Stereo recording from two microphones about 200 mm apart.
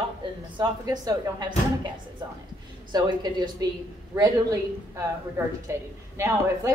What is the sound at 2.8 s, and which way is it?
Speech, 20° right (ahead or behind).